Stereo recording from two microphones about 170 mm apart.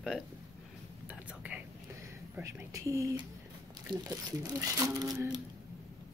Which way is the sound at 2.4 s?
20° right (ahead or behind).